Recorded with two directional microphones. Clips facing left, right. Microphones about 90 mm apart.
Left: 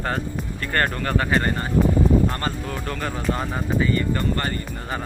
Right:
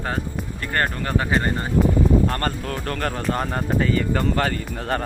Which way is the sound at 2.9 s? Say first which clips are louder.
Right 2 dB; 55° right (ahead or behind).